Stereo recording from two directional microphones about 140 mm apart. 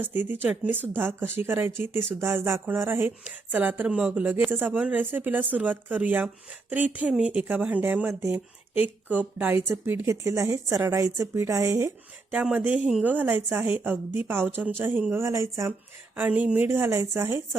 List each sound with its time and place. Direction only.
0.0 s speech: 15° right (ahead or behind)
12.3 s speech: 10° right (ahead or behind)